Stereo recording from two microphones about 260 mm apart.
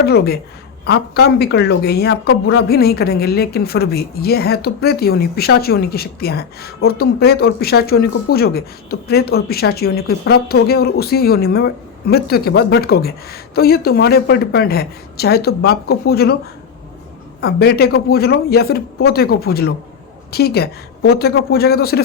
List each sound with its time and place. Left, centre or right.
0.0 s a woman's voice: left
17.4 s a woman's voice: left